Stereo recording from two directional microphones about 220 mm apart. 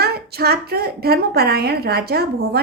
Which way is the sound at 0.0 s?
45° right (ahead or behind).